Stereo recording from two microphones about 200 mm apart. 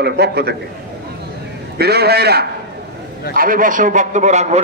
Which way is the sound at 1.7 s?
55° right (ahead or behind).